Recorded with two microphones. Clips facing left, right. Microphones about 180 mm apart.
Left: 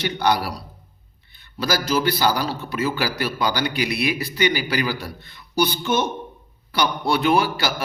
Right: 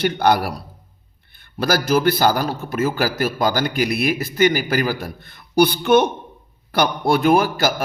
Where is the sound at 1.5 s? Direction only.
55° right (ahead or behind).